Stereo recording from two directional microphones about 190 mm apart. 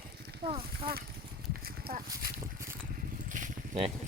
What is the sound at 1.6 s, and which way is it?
Horse, 50° right (ahead or behind).